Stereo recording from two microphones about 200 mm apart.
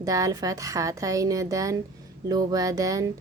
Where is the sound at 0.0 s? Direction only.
15° right (ahead or behind).